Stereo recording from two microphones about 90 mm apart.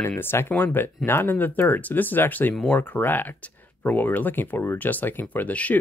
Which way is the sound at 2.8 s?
20° left (ahead or behind).